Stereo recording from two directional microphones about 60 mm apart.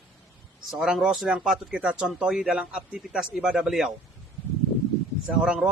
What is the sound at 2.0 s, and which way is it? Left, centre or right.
Speech, centre.